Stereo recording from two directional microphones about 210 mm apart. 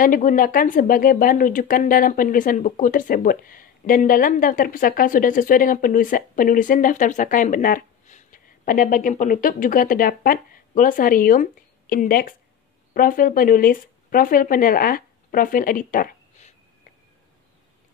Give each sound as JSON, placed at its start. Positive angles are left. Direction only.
{"t": 0.0, "sound": "speech", "side_deg": 40}